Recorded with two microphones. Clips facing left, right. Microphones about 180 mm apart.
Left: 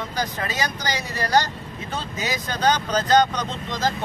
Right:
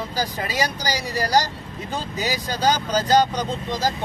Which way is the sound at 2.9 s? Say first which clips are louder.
Even; 10° right (ahead or behind).